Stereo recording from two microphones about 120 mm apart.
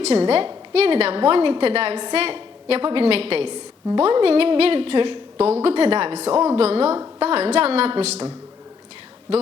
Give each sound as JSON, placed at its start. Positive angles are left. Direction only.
{"t": 0.0, "sound": "a woman's voice", "side_deg": -55}
{"t": 3.5, "sound": "a woman's voice", "side_deg": -40}
{"t": 4.0, "sound": "a woman's voice", "side_deg": -50}
{"t": 6.3, "sound": "a woman's voice", "side_deg": -25}
{"t": 6.6, "sound": "a woman's voice", "side_deg": -60}